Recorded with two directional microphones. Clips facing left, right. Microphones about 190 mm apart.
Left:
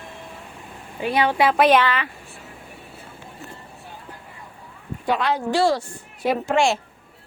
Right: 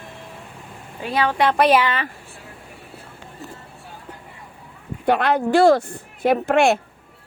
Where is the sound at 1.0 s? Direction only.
15° left (ahead or behind).